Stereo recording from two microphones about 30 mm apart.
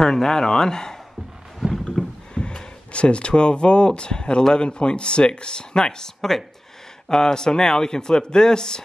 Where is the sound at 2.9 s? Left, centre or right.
Left.